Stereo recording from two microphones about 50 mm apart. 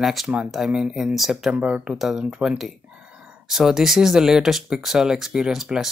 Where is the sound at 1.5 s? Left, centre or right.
Right.